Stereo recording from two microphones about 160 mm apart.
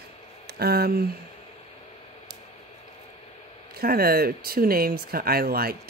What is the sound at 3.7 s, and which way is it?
Speech, 70° right (ahead or behind).